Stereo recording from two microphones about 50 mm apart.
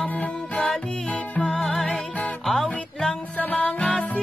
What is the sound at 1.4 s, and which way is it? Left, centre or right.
Music, centre.